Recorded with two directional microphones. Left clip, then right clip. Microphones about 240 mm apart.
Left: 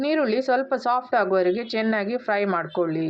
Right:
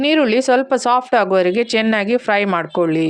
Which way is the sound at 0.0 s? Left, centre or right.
Right.